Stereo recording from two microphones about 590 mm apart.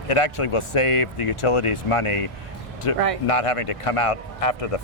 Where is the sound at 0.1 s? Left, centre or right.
Left.